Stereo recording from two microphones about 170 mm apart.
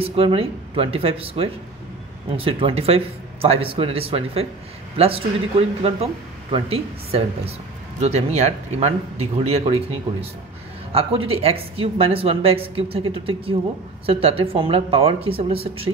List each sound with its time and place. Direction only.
0.0 s speech: 35° right (ahead or behind)
10.9 s speech: 35° right (ahead or behind)